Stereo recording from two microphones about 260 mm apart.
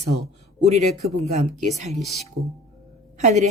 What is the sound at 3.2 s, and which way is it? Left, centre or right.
Speech, right.